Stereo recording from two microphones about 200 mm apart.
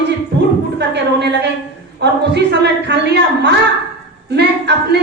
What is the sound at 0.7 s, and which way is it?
A woman's voice, 60° right (ahead or behind).